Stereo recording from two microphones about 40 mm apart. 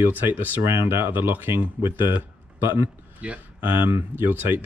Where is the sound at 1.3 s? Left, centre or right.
Right.